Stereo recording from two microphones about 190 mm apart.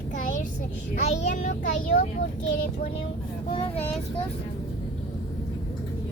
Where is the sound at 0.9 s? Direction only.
45° left (ahead or behind).